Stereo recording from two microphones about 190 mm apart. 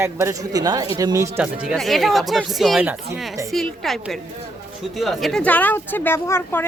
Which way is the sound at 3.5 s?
Centre (ahead or behind).